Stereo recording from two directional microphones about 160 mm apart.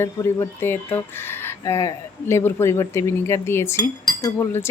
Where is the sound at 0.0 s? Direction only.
15° left (ahead or behind).